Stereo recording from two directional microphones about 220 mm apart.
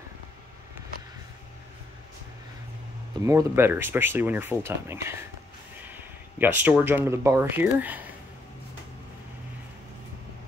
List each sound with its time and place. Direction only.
3.3 s speech: 10° right (ahead or behind)
6.3 s speech: 10° right (ahead or behind)